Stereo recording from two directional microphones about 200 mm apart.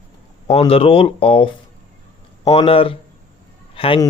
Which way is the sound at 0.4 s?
30° left (ahead or behind).